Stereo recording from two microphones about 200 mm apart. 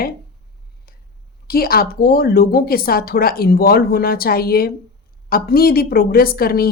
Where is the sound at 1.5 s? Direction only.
50° left (ahead or behind).